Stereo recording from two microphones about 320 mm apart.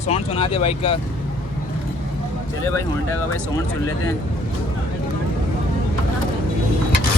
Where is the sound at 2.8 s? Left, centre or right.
Centre.